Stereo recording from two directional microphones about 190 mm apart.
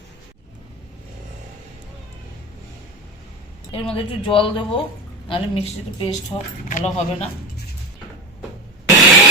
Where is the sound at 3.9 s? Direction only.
30° left (ahead or behind).